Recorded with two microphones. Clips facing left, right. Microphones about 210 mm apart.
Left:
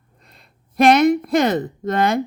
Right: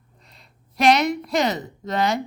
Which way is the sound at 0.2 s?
55° left (ahead or behind).